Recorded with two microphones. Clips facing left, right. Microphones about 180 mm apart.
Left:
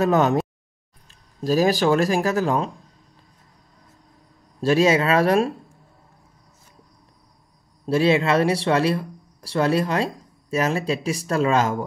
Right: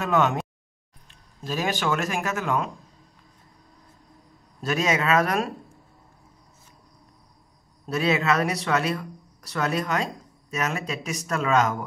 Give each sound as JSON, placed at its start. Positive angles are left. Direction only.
{"t": 0.0, "sound": "speech", "side_deg": 40}
{"t": 1.4, "sound": "speech", "side_deg": 40}
{"t": 4.6, "sound": "speech", "side_deg": 30}
{"t": 7.8, "sound": "speech", "side_deg": 30}